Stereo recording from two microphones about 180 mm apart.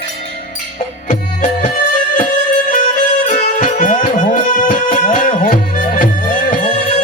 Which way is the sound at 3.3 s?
50° left (ahead or behind).